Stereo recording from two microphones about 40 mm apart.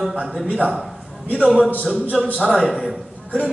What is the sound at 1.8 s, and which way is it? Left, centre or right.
A man's voice, centre.